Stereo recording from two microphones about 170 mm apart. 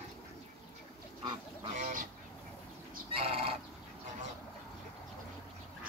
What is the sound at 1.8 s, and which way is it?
Goose, 45° right (ahead or behind).